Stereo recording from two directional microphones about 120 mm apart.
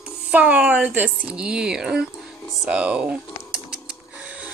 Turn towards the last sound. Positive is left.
turn(degrees=-10)  # may be behind; listen again after turning